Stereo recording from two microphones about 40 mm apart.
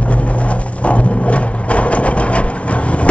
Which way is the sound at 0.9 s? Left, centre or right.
Left.